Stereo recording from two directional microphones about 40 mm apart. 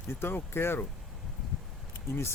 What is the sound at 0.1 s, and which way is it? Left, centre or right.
Speech, left.